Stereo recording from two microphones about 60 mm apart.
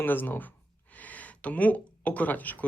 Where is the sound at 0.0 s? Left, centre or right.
Left.